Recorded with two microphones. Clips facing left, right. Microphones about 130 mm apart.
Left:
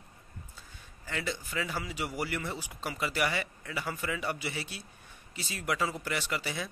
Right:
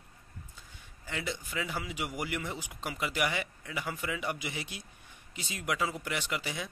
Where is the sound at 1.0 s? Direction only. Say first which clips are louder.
Left 1 dB; 15° right (ahead or behind).